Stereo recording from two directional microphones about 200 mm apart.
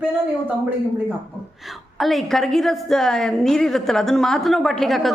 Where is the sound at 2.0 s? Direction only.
Centre (ahead or behind).